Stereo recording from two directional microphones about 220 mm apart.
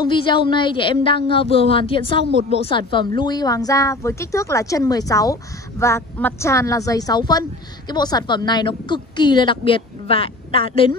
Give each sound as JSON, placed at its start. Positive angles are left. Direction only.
{"t": 0.0, "sound": "a woman's voice", "side_deg": 20}